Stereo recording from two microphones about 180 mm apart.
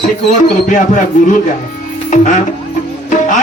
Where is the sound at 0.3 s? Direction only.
45° left (ahead or behind).